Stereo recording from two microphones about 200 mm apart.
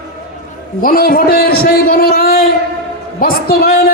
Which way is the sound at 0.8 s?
45° left (ahead or behind).